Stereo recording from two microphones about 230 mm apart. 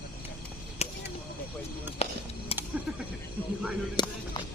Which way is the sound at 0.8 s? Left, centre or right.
Left.